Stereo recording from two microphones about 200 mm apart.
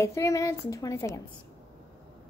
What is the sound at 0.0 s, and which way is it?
A woman's voice, 15° left (ahead or behind).